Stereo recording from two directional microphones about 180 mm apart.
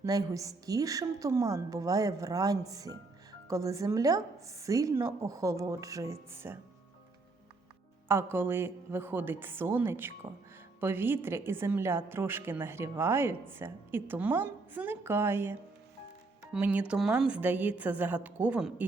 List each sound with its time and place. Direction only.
0.0 s a woman's voice: 20° right (ahead or behind)
8.0 s a woman's voice: 15° right (ahead or behind)